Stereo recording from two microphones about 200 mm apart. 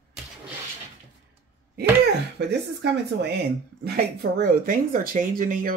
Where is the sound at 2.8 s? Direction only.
55° right (ahead or behind).